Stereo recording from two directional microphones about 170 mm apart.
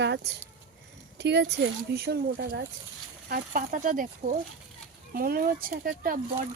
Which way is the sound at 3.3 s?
50° right (ahead or behind).